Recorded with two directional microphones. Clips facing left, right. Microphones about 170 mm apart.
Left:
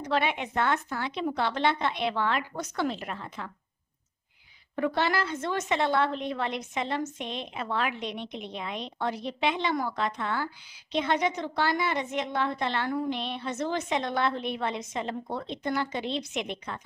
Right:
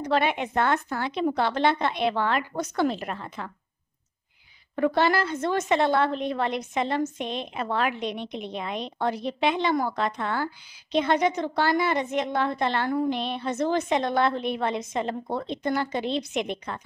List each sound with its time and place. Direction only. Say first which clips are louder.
0.1 s a woman's voice: right 3 dB; 45° right (ahead or behind)
4.7 s a woman's voice: right 5 dB; 45° right (ahead or behind)